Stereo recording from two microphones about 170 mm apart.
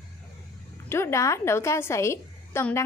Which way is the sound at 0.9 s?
15° left (ahead or behind).